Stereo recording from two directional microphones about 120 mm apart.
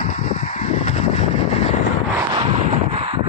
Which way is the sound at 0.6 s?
75° left (ahead or behind).